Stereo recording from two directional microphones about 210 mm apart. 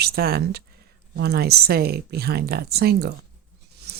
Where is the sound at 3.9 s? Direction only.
50° right (ahead or behind).